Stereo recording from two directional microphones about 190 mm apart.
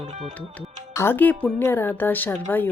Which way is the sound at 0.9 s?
10° left (ahead or behind).